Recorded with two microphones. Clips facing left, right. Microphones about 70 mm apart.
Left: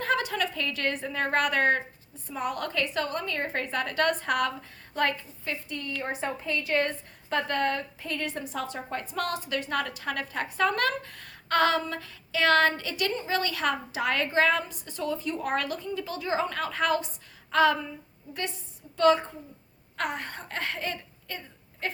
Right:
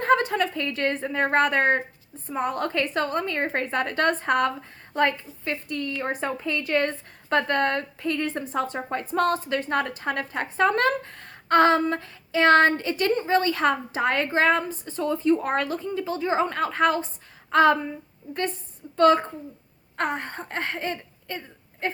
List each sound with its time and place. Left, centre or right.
0.0 s a woman's voice: right
6.1 s a woman's voice: right
18.9 s a woman's voice: right